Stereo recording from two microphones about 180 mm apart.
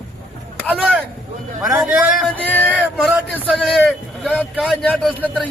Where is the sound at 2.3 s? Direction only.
10° left (ahead or behind).